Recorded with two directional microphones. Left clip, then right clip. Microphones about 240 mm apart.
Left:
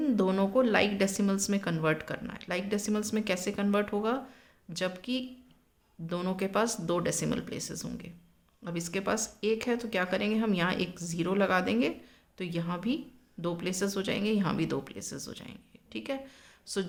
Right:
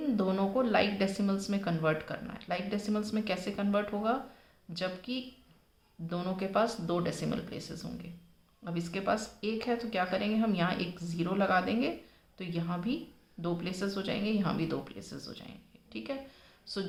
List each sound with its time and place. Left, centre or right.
0.0 s speech: left